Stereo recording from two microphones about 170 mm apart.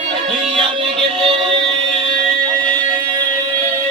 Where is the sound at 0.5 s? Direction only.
30° right (ahead or behind).